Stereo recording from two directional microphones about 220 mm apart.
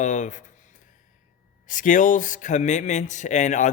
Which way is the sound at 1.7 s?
35° left (ahead or behind).